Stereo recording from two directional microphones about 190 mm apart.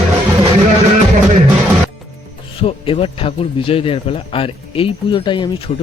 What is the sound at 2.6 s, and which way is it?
Speech, 30° left (ahead or behind).